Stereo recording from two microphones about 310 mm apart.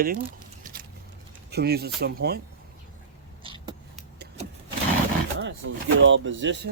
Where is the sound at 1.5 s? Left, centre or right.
Right.